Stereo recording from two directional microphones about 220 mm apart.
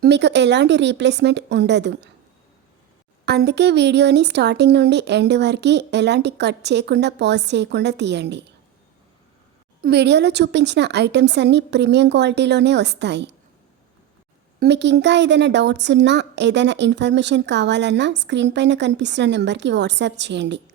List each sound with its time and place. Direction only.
0.0 s a woman's voice: 50° right (ahead or behind)
3.2 s a woman's voice: 50° right (ahead or behind)
9.8 s a woman's voice: 50° right (ahead or behind)
14.6 s a woman's voice: 50° right (ahead or behind)